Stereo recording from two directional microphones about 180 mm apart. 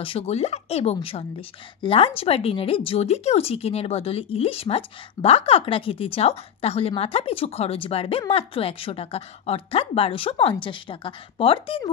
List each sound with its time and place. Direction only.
0.0 s speech: 35° left (ahead or behind)